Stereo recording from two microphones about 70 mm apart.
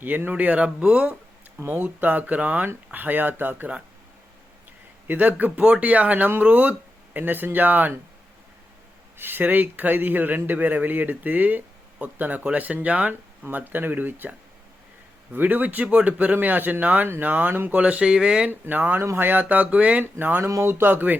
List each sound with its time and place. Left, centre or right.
0.0 s a man's voice: right
1.5 s a man's voice: right
5.0 s a man's voice: right
9.1 s a man's voice: right
17.7 s speech: centre
18.6 s a man's voice: right
20.5 s speech: right